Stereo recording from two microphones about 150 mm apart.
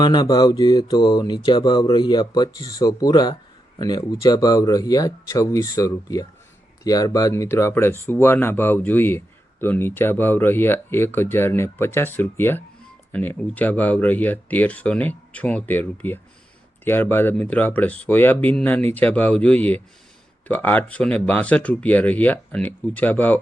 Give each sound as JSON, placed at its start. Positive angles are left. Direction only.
{"t": 0.0, "sound": "speech", "side_deg": 30}